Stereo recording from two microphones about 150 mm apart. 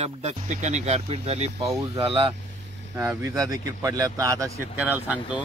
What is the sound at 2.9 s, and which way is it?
A man's voice, 20° right (ahead or behind).